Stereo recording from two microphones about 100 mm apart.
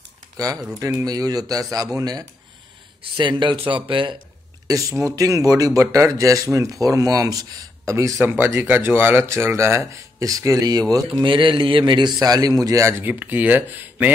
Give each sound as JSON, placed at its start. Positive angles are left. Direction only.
{"t": 0.4, "sound": "speech", "side_deg": -35}
{"t": 3.0, "sound": "a man's voice", "side_deg": -55}
{"t": 4.6, "sound": "speech", "side_deg": -35}
{"t": 11.2, "sound": "a man's voice", "side_deg": -55}
{"t": 13.0, "sound": "speech", "side_deg": -15}